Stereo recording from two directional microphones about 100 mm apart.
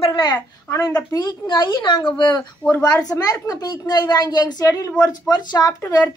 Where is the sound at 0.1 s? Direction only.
50° left (ahead or behind).